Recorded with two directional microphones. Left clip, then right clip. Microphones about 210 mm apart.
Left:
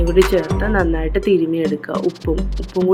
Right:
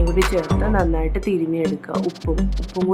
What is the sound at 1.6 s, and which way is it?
Speech, centre (ahead or behind).